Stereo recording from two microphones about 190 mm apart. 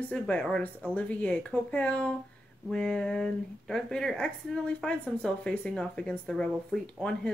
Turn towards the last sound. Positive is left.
turn(degrees=5)  # may be behind; listen again after turning